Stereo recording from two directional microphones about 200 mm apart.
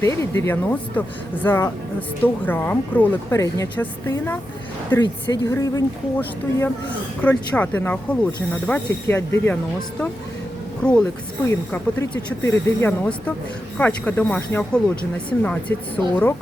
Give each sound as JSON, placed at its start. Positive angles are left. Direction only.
{"t": 0.0, "sound": "speech", "side_deg": 15}
{"t": 10.8, "sound": "speech", "side_deg": 5}